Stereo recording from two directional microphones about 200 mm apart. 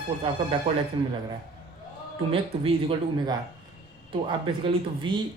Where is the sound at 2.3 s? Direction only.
25° right (ahead or behind).